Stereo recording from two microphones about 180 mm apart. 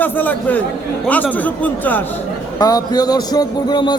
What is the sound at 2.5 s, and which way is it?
A man's voice, 20° left (ahead or behind).